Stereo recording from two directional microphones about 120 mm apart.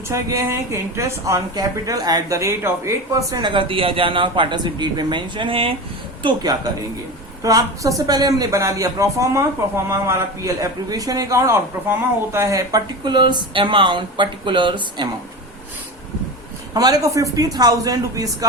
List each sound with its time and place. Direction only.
0.1 s a woman's voice: 25° right (ahead or behind)
3.4 s speech: 45° right (ahead or behind)
6.2 s a man's voice: 35° right (ahead or behind)
16.7 s a woman's voice: 30° right (ahead or behind)